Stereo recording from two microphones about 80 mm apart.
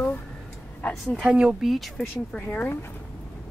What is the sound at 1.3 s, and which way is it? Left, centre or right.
Speech, centre.